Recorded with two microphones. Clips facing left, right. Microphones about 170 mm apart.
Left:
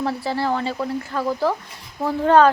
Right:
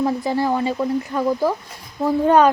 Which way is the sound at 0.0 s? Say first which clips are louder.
Right 3 dB; 15° right (ahead or behind).